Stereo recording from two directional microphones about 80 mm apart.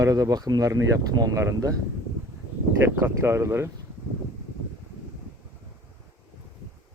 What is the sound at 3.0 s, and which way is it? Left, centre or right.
Speech, right.